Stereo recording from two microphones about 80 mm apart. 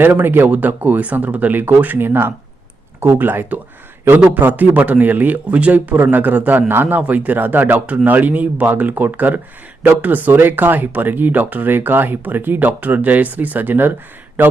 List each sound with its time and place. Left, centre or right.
0.0 s a man's voice: right